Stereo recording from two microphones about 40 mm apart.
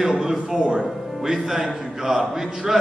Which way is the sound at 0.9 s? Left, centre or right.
Centre.